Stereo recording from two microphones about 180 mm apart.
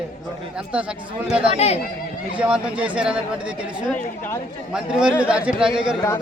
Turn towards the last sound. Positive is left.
turn(degrees=-5)  # may be behind; listen again after turning